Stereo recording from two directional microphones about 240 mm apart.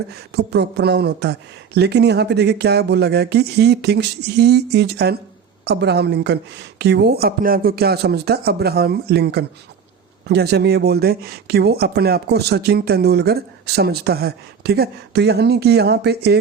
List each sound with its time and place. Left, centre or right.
0.1 s speech: right